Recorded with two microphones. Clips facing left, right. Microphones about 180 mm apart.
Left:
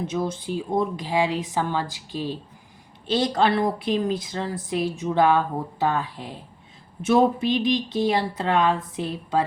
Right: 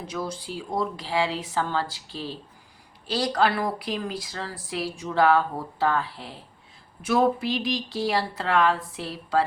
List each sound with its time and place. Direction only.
0.0 s speech: 25° left (ahead or behind)